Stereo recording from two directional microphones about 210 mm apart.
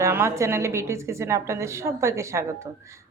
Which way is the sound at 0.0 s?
10° right (ahead or behind).